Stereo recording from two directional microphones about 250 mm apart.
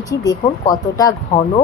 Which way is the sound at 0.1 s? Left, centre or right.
Centre.